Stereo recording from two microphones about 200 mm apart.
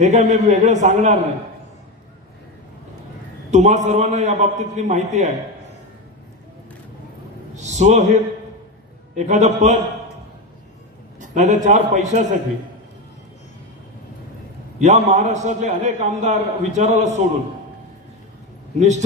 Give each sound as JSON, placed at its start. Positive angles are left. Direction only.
{"t": 0.0, "sound": "a man's voice", "side_deg": -35}
{"t": 3.5, "sound": "a man's voice", "side_deg": -35}
{"t": 7.5, "sound": "a man's voice", "side_deg": -35}
{"t": 11.1, "sound": "a man's voice", "side_deg": -35}
{"t": 14.8, "sound": "a man's voice", "side_deg": -35}
{"t": 18.8, "sound": "a man's voice", "side_deg": -35}